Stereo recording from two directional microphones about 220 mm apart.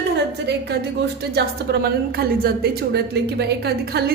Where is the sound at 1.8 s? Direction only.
45° right (ahead or behind).